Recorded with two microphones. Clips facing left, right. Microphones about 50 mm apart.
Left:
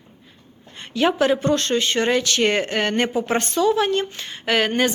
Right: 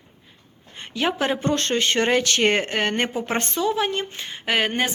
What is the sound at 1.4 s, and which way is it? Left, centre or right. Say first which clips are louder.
A woman's voice: left 2 dB; right.